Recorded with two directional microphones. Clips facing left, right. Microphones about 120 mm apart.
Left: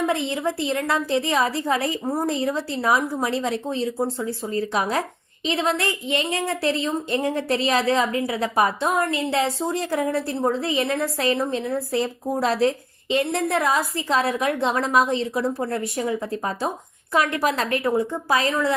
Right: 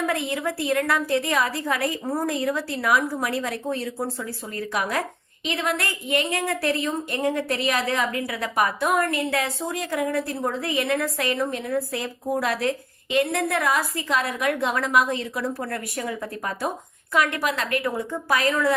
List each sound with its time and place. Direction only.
0.0 s a woman's voice: 25° left (ahead or behind)